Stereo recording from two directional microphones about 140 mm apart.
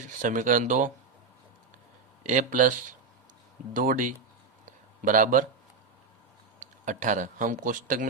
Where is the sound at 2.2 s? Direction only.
65° right (ahead or behind).